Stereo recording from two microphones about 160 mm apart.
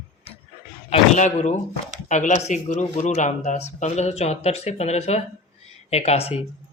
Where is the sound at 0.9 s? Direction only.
45° left (ahead or behind).